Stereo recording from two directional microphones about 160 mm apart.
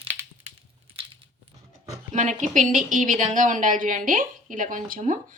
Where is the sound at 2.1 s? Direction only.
50° right (ahead or behind).